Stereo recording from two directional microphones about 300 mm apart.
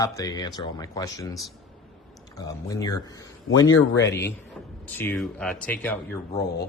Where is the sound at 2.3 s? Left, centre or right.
Centre.